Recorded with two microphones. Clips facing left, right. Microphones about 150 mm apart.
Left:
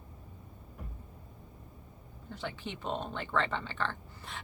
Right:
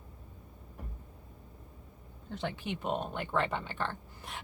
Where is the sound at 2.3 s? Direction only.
15° right (ahead or behind).